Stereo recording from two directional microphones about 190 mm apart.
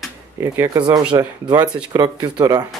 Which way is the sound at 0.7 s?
25° right (ahead or behind).